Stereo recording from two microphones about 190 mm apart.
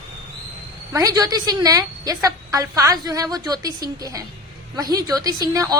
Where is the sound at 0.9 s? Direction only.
20° right (ahead or behind).